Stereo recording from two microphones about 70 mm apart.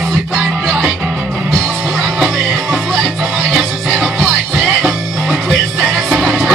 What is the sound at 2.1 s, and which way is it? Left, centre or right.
Music, centre.